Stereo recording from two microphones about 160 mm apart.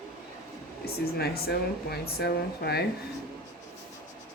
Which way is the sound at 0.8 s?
75° left (ahead or behind).